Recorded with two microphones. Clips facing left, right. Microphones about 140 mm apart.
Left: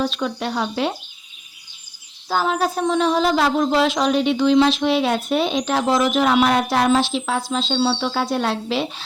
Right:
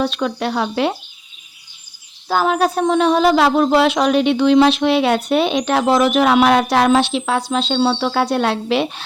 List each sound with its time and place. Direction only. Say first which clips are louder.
0.0 s speech: right 3 dB; 70° right (ahead or behind)
2.3 s speech: right 4 dB; 60° right (ahead or behind)